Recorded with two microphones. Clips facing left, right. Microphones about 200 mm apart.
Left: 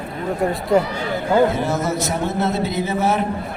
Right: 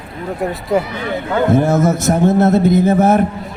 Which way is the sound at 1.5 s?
50° right (ahead or behind).